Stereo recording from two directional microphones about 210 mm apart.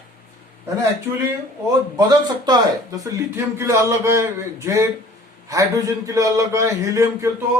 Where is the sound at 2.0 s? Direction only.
20° right (ahead or behind).